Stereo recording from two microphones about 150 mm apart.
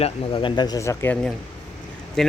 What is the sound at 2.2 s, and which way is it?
Speech, centre (ahead or behind).